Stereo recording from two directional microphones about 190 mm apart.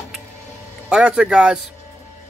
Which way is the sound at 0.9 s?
5° right (ahead or behind).